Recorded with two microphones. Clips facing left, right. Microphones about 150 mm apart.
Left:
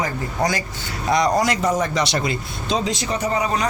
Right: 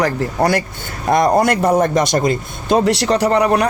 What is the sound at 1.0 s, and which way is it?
Speech, 55° right (ahead or behind).